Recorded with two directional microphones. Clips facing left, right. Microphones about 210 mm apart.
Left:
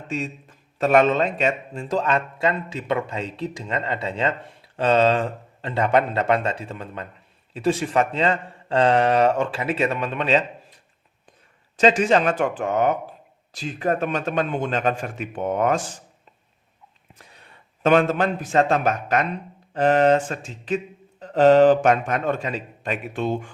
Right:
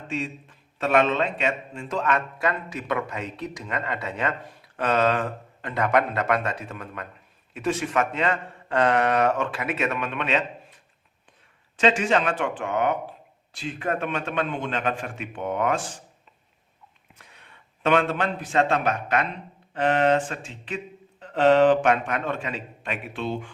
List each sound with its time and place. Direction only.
0.1 s a man's voice: 40° left (ahead or behind)
11.8 s speech: 40° left (ahead or behind)
17.2 s speech: 35° left (ahead or behind)